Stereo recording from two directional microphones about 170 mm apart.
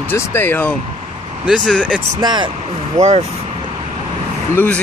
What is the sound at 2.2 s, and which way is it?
Speech, 25° right (ahead or behind).